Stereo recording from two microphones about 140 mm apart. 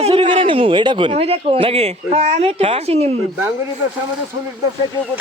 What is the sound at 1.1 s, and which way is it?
Speech, 45° right (ahead or behind).